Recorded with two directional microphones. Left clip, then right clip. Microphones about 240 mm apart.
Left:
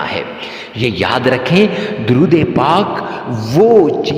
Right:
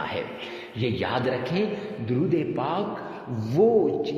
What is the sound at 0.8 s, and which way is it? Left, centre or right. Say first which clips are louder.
A man's voice: left 12 dB; left.